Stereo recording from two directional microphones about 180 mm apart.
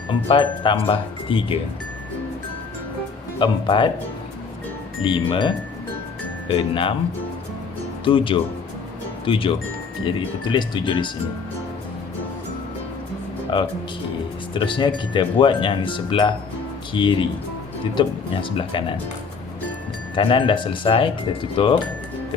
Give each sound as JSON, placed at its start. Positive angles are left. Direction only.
{"t": 0.1, "sound": "speech", "side_deg": 25}
{"t": 3.3, "sound": "speech", "side_deg": 25}
{"t": 5.0, "sound": "speech", "side_deg": 25}
{"t": 8.0, "sound": "speech", "side_deg": 30}
{"t": 13.5, "sound": "speech", "side_deg": 25}
{"t": 20.1, "sound": "speech", "side_deg": 30}